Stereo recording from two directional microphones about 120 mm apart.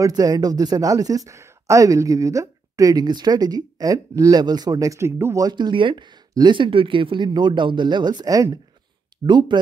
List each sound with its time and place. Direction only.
0.0 s speech: 30° right (ahead or behind)
9.2 s speech: 40° right (ahead or behind)